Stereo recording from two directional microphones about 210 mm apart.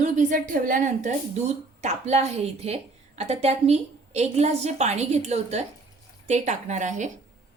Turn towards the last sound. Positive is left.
turn(degrees=-35)  # may be behind; listen again after turning